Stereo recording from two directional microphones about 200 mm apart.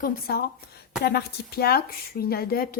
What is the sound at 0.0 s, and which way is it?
A woman's voice, 50° left (ahead or behind).